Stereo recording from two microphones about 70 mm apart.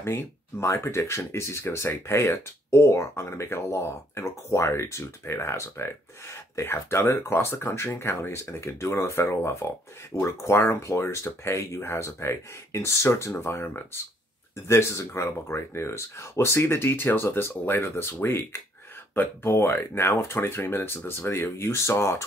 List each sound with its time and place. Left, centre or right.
0.0 s speech: left